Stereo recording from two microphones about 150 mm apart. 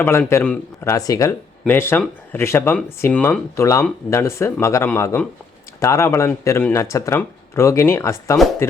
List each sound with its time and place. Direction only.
0.0 s speech: 15° left (ahead or behind)